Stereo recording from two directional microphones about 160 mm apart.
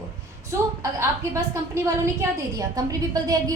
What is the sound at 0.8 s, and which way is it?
A woman's voice, 15° right (ahead or behind).